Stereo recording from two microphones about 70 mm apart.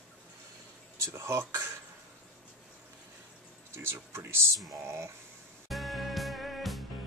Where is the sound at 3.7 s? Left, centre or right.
Right.